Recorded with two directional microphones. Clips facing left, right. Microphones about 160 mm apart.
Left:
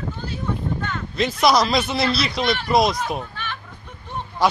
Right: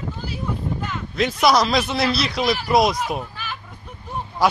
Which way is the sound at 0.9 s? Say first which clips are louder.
Right 2 dB; centre (ahead or behind).